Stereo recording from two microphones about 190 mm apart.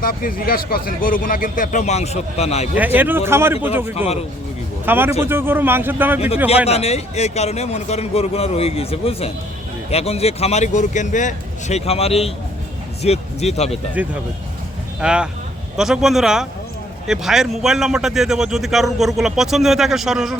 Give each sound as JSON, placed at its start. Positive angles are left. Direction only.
{"t": 0.0, "sound": "speech", "side_deg": 50}
{"t": 2.7, "sound": "speech", "side_deg": -10}
{"t": 3.9, "sound": "a man's voice", "side_deg": 35}
{"t": 4.9, "sound": "speech", "side_deg": -10}
{"t": 6.1, "sound": "a man's voice", "side_deg": 30}
{"t": 15.0, "sound": "speech", "side_deg": -5}